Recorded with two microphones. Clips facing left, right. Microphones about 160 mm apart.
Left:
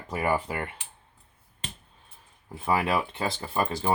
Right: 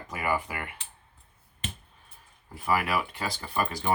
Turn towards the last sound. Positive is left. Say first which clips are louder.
# left 2 dB
turn(degrees=25)  # may be behind; listen again after turning